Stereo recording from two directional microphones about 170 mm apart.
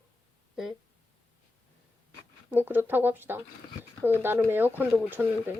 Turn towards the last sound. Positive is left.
turn(degrees=-10)  # may be behind; listen again after turning